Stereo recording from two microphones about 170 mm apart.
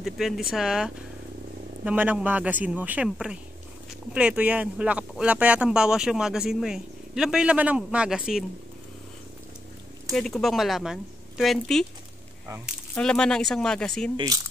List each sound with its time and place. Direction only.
0.0 s speech: centre (ahead or behind)
10.1 s speech: centre (ahead or behind)
12.9 s speech: 5° left (ahead or behind)
14.1 s speech: 20° right (ahead or behind)